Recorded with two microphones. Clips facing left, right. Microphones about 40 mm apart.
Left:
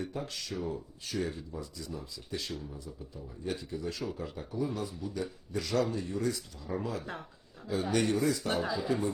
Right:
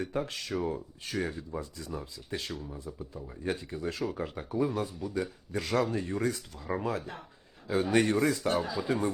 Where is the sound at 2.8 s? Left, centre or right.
Right.